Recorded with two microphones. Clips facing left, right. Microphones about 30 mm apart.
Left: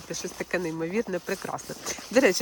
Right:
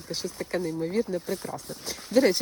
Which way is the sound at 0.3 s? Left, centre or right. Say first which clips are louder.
Left 1 dB; left.